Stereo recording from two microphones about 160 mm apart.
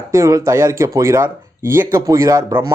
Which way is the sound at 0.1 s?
20° right (ahead or behind).